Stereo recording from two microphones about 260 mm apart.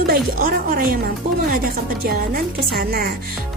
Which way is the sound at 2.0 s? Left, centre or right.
Right.